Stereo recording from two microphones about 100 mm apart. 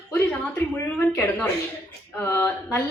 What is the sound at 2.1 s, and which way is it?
Speech, 20° left (ahead or behind).